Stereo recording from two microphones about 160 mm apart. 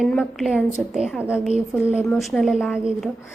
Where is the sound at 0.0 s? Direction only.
5° left (ahead or behind).